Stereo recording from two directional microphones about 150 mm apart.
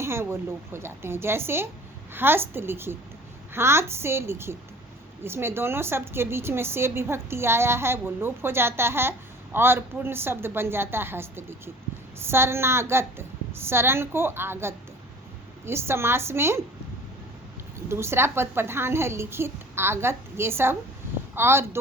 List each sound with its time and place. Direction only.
0.0 s a woman's voice: 15° right (ahead or behind)
17.7 s a woman's voice: 15° right (ahead or behind)